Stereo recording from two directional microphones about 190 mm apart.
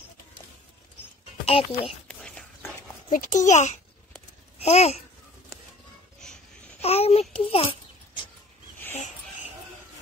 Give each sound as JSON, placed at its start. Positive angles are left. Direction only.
{"t": 1.4, "sound": "a child's voice", "side_deg": 30}
{"t": 2.0, "sound": "whispering", "side_deg": 5}
{"t": 3.1, "sound": "a child's voice", "side_deg": 40}
{"t": 6.8, "sound": "a sound", "side_deg": 30}